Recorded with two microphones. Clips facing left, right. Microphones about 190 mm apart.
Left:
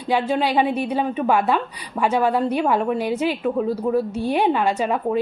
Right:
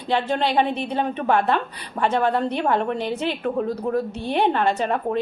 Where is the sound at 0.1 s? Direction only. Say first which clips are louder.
Left 2 dB; 10° left (ahead or behind).